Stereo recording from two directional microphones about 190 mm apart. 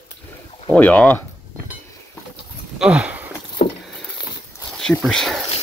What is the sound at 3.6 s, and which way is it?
Vehicle, 35° left (ahead or behind).